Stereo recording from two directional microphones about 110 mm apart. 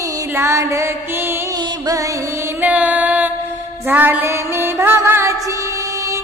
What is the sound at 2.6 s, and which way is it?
Music, 15° right (ahead or behind).